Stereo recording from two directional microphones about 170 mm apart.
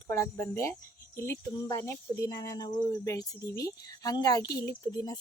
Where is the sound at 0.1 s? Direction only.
15° left (ahead or behind).